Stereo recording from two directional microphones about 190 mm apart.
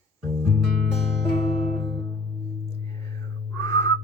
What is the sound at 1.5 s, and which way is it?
Music, 30° left (ahead or behind).